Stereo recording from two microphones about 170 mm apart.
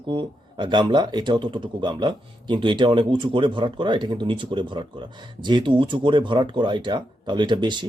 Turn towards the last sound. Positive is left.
turn(degrees=-25)  # may be behind; listen again after turning